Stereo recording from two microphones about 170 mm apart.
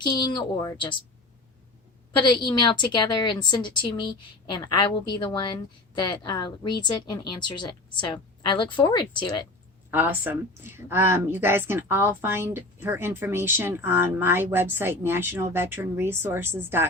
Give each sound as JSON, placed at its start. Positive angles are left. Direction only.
{"t": 0.0, "sound": "a woman's voice", "side_deg": 25}
{"t": 2.3, "sound": "a woman's voice", "side_deg": 30}
{"t": 9.9, "sound": "speech", "side_deg": -10}